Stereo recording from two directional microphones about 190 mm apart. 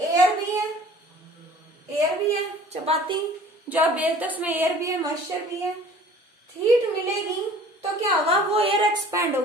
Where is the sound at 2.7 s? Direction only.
30° right (ahead or behind).